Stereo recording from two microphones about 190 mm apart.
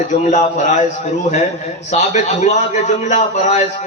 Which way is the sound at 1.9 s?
35° left (ahead or behind).